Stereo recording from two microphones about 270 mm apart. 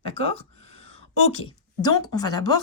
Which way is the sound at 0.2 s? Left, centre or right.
Left.